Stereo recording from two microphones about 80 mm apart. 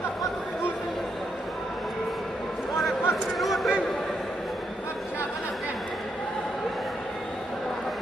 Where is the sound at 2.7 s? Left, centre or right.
Centre.